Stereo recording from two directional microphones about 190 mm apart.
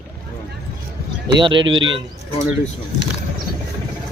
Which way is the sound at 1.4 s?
25° right (ahead or behind).